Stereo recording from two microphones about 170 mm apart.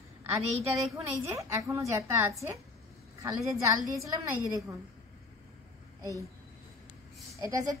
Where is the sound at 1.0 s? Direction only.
15° right (ahead or behind).